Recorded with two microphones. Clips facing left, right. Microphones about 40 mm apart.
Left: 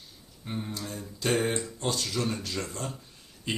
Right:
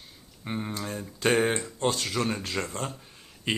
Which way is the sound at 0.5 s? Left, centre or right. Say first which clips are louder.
Right 3 dB; right.